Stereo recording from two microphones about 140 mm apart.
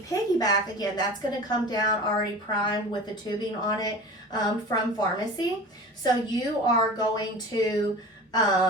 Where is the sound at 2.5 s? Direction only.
35° left (ahead or behind).